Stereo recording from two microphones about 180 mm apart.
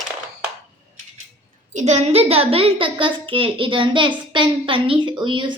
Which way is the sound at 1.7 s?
40° right (ahead or behind).